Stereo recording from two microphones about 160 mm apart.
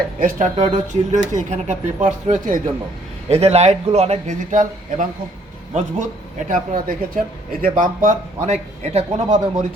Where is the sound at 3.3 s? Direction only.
40° right (ahead or behind).